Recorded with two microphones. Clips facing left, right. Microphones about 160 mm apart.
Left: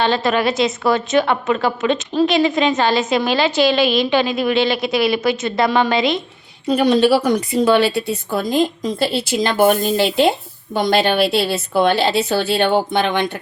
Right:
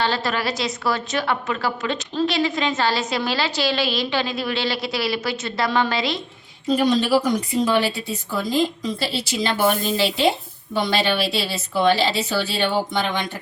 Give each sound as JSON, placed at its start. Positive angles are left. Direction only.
{"t": 0.0, "sound": "a woman's voice", "side_deg": 20}
{"t": 6.7, "sound": "a woman's voice", "side_deg": 65}